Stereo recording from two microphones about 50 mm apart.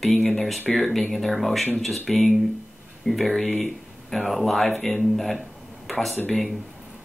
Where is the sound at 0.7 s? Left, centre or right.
Centre.